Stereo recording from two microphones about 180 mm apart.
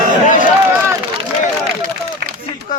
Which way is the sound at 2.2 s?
55° right (ahead or behind).